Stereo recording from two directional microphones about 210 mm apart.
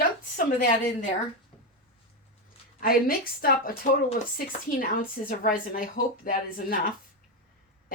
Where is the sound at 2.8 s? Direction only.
45° left (ahead or behind).